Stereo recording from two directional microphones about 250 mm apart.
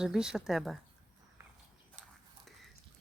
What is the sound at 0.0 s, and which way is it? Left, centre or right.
Speech, centre.